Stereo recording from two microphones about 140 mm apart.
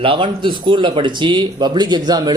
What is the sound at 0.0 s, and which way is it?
Speech, 40° right (ahead or behind).